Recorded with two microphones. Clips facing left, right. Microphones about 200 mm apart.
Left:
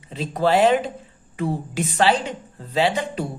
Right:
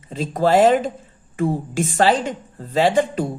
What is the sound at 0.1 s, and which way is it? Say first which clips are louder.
Speech: right 3 dB; 45° right (ahead or behind).